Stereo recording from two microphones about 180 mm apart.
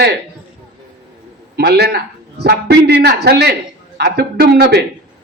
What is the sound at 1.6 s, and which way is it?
Speech, 65° right (ahead or behind).